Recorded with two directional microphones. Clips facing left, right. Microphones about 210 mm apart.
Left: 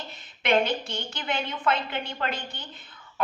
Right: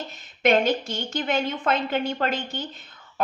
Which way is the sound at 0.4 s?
40° right (ahead or behind).